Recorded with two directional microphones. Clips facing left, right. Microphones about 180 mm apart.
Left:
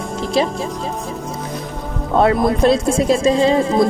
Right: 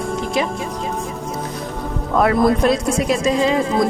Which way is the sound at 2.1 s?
30° left (ahead or behind).